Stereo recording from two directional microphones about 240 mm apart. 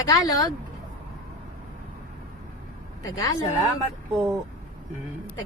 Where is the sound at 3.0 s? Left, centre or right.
Centre.